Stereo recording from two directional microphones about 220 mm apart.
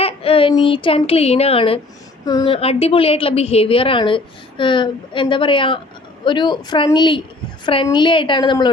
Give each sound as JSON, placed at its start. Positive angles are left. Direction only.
{"t": 0.0, "sound": "a woman's voice", "side_deg": 25}